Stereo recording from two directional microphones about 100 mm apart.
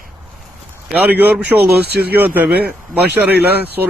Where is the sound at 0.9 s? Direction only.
15° right (ahead or behind).